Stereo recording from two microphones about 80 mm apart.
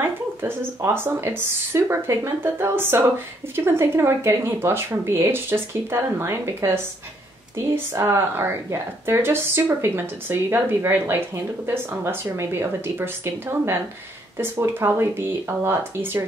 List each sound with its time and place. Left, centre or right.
0.0 s speech: right